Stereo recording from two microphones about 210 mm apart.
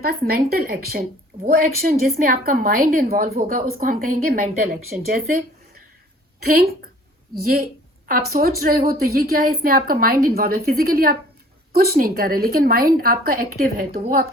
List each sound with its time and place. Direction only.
0.0 s a woman's voice: 45° right (ahead or behind)
6.4 s a woman's voice: 45° right (ahead or behind)